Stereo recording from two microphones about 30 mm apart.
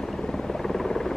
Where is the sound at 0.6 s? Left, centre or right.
Centre.